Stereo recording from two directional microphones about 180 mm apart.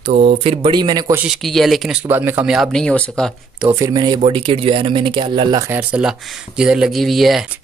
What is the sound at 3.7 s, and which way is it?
Speech, 20° right (ahead or behind).